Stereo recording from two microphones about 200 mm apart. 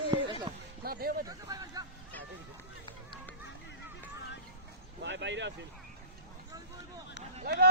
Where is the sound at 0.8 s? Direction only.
50° right (ahead or behind).